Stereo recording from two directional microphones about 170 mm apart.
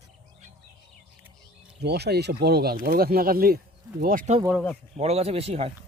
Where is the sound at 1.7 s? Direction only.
75° right (ahead or behind); by 4.3 s 55° right (ahead or behind).